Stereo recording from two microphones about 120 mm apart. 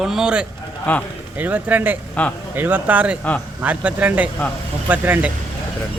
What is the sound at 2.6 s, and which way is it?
A man's voice, 15° right (ahead or behind).